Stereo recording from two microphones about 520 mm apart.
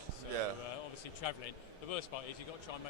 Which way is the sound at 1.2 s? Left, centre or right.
Left.